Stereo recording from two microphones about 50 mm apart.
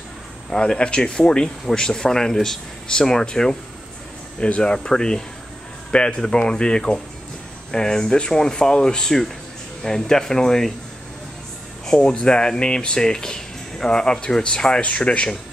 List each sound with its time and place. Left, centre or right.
0.5 s speech: centre
11.8 s speech: centre